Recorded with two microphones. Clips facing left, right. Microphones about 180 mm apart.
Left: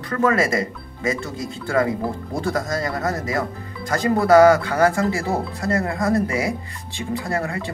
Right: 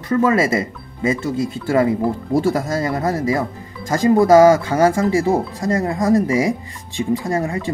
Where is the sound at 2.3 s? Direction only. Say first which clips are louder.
Right 5 dB; 25° right (ahead or behind).